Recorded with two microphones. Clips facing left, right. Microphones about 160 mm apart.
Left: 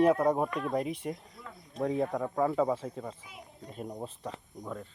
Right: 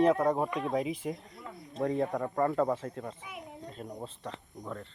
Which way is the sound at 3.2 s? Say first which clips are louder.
Right 5 dB; 65° right (ahead or behind).